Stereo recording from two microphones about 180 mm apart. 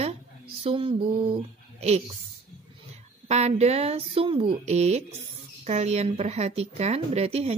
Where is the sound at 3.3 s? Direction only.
35° right (ahead or behind).